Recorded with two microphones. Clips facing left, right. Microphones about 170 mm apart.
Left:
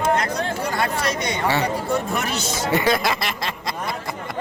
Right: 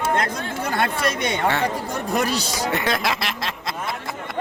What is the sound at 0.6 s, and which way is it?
Speech, 55° right (ahead or behind).